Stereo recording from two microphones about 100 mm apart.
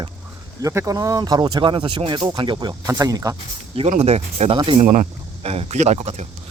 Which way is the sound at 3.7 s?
85° right.